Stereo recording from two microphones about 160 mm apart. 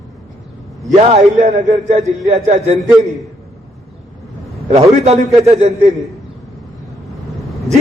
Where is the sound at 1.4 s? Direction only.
50° right (ahead or behind).